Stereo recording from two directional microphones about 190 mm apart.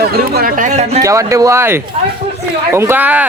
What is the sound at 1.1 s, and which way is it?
Speech, 15° right (ahead or behind).